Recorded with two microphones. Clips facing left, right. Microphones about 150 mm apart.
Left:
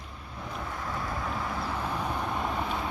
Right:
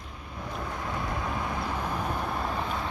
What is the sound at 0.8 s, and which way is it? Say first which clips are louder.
Vehicle: right 1 dB; centre (ahead or behind).